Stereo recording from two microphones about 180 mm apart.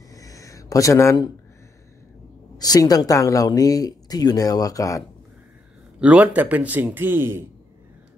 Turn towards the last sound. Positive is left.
turn(degrees=-15)  # may be behind; listen again after turning